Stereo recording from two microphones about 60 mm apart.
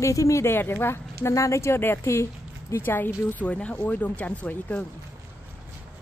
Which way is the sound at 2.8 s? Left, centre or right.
Left.